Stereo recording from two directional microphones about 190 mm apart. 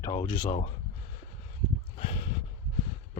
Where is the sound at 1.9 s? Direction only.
30° left (ahead or behind).